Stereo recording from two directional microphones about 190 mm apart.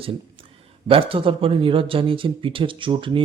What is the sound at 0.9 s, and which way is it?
Speech, 30° right (ahead or behind).